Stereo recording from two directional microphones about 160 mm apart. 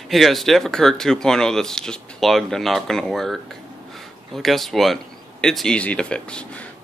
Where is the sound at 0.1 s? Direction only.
Centre (ahead or behind).